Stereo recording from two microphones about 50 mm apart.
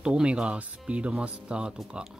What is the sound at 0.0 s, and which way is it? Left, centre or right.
Speech, centre.